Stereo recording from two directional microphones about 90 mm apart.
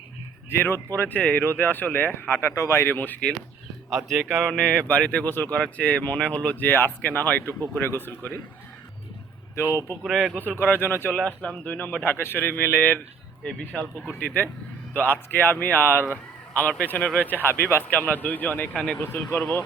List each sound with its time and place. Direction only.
0.6 s speech: 20° left (ahead or behind)
2.6 s speech: 30° left (ahead or behind)
3.8 s speech: centre (ahead or behind)
4.4 s speech: 10° left (ahead or behind)
9.6 s speech: 25° right (ahead or behind)
10.0 s speech: centre (ahead or behind)
10.3 s speech: 20° left (ahead or behind)
11.1 s speech: 15° left (ahead or behind)